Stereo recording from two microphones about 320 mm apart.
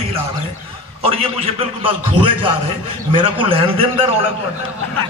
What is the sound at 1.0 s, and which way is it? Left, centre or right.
A man's voice, centre.